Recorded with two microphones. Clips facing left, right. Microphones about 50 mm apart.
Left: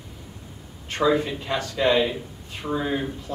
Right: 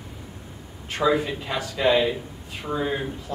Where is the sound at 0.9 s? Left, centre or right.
Centre.